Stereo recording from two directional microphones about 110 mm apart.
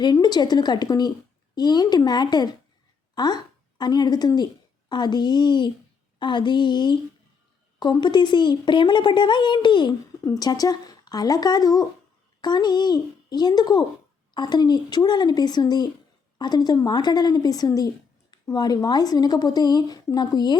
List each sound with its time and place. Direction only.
0.0 s a woman's voice: 40° left (ahead or behind)